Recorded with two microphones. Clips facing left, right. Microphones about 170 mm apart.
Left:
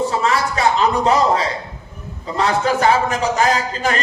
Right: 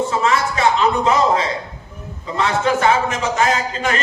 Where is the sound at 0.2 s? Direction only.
35° left (ahead or behind).